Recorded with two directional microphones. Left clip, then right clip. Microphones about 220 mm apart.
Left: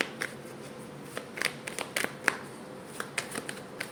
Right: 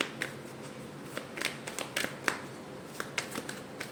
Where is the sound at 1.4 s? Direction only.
20° left (ahead or behind).